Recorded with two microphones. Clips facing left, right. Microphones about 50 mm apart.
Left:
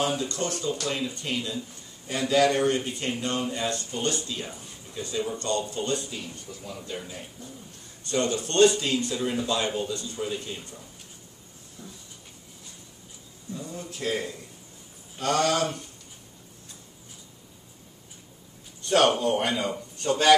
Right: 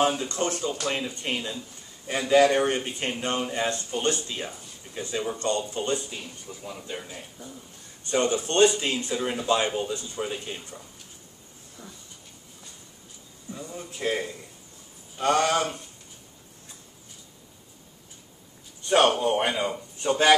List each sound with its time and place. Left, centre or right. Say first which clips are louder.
0.2 s speech: right 2 dB; right; by 7.5 s centre
8.1 s speech: right 2 dB; right
11.8 s speech: even; right
13.5 s speech: left 1 dB; centre
18.9 s speech: right 1 dB; centre